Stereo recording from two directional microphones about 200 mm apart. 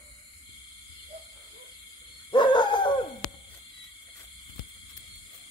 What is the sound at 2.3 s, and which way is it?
Owl, 25° left (ahead or behind).